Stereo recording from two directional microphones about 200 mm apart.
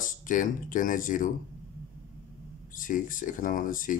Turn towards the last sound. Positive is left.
turn(degrees=40)  # may be behind; listen again after turning